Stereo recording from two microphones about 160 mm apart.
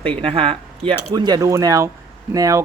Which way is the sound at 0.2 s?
35° right (ahead or behind).